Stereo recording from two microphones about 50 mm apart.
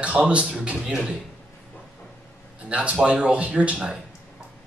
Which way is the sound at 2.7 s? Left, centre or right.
Right.